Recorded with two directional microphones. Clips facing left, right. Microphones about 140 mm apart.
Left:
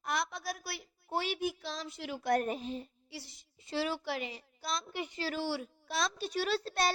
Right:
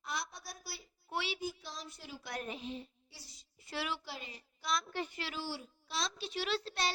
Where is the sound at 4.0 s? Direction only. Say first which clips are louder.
Left 10 dB; 75° left (ahead or behind).